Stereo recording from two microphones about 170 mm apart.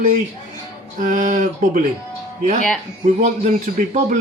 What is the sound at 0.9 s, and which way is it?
Speech, 50° right (ahead or behind).